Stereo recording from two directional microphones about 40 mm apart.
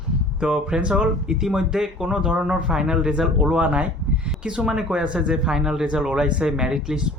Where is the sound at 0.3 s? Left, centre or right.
Right.